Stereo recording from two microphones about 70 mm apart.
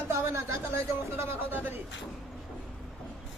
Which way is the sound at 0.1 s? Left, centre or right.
Right.